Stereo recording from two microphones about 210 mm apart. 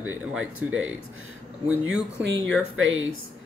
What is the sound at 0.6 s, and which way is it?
Speech, 5° right (ahead or behind).